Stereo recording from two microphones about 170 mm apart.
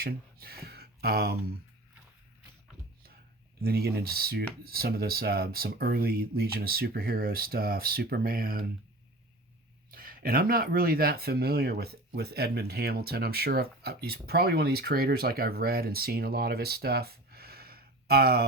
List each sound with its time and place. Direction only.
0.0 s speech: 65° right (ahead or behind)
3.6 s speech: 65° right (ahead or behind)
9.9 s speech: 55° right (ahead or behind)